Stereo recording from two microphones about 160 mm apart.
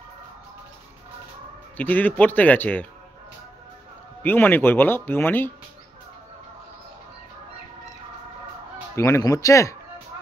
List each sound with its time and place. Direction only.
1.8 s speech: 10° left (ahead or behind)
4.2 s speech: 10° left (ahead or behind)
8.9 s speech: 15° left (ahead or behind)